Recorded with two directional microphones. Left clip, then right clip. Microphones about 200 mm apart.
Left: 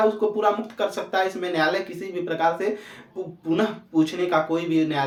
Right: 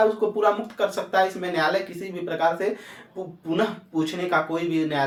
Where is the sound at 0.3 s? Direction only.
25° left (ahead or behind).